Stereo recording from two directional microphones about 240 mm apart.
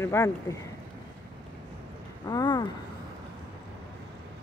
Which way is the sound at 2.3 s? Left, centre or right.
Centre.